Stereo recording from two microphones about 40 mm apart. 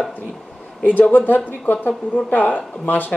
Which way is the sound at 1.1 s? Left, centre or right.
Left.